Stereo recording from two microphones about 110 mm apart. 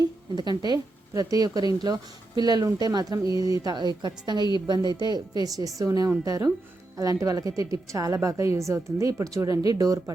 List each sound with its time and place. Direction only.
0.3 s a woman's voice: 40° right (ahead or behind)